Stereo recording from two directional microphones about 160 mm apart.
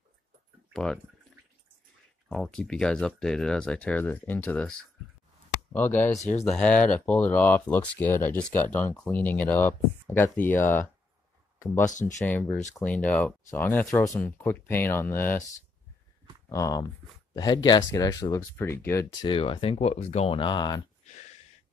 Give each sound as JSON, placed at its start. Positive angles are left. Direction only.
{"t": 2.2, "sound": "speech", "side_deg": 0}
{"t": 6.1, "sound": "speech", "side_deg": 45}
{"t": 6.4, "sound": "speech", "side_deg": 5}
{"t": 11.8, "sound": "speech", "side_deg": 50}
{"t": 12.2, "sound": "speech", "side_deg": 10}
{"t": 16.4, "sound": "speech", "side_deg": 20}
{"t": 19.2, "sound": "speech", "side_deg": 35}